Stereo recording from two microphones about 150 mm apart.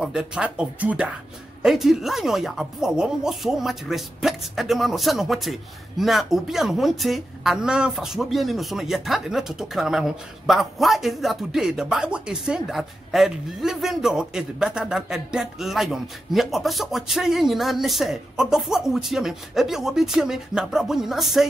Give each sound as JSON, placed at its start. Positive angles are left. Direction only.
{"t": 0.0, "sound": "speech", "side_deg": -5}